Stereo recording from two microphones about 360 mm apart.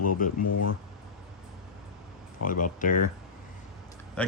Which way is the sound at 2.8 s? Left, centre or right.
Left.